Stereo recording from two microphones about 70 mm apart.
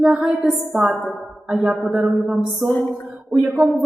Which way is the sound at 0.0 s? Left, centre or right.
Centre.